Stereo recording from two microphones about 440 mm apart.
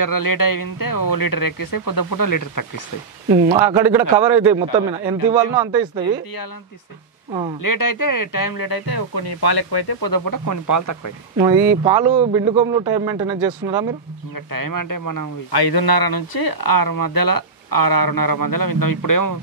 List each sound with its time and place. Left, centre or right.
0.0 s speech: left
3.3 s a man's voice: centre
7.6 s speech: left
11.3 s a man's voice: centre
14.5 s speech: left